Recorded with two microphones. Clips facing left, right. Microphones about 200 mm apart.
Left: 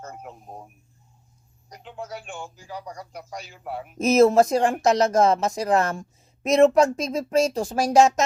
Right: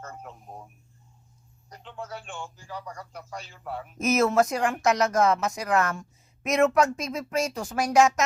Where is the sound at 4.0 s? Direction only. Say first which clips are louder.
Left 6 dB; 30° left (ahead or behind).